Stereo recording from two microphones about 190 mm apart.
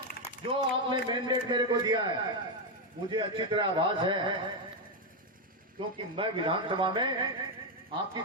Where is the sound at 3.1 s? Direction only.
25° right (ahead or behind).